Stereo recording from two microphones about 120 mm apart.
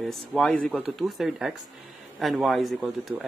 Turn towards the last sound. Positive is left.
turn(degrees=0)  # may be behind; listen again after turning